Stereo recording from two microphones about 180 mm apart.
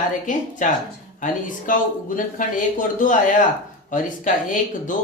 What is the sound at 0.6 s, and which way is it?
Speech, 45° left (ahead or behind).